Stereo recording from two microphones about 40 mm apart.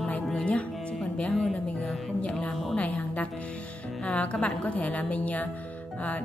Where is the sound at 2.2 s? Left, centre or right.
Left.